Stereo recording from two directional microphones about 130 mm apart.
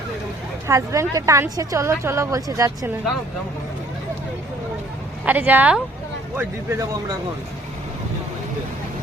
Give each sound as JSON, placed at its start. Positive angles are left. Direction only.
{"t": 0.7, "sound": "a woman's voice", "side_deg": -25}
{"t": 5.2, "sound": "a woman's voice", "side_deg": -15}